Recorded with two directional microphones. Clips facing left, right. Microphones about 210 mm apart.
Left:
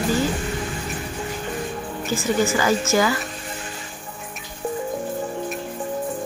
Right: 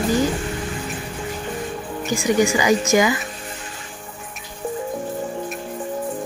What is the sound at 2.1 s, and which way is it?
A woman's voice, 15° right (ahead or behind).